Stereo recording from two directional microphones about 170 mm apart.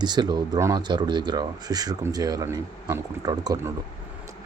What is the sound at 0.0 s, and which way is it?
Speech, 25° right (ahead or behind).